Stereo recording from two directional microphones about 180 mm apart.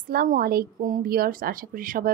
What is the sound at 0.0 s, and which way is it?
Speech, 55° right (ahead or behind).